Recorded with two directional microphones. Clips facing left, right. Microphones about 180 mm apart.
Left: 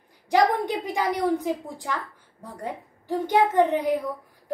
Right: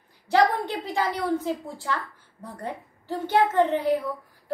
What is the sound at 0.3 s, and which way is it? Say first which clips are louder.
A woman's voice: left 1 dB; 15° left (ahead or behind).